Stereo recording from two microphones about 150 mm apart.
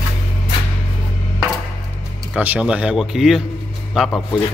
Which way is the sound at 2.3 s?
10° right (ahead or behind).